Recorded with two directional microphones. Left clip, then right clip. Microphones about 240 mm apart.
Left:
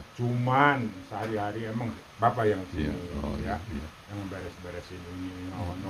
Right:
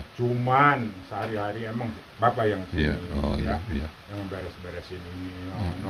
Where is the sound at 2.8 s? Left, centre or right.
Centre.